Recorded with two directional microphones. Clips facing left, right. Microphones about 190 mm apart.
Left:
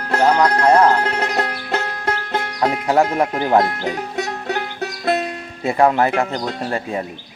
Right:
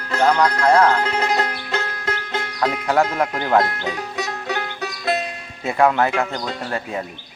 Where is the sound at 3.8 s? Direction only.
50° left (ahead or behind).